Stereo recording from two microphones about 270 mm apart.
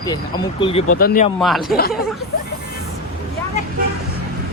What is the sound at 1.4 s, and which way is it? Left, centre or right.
Speech, centre.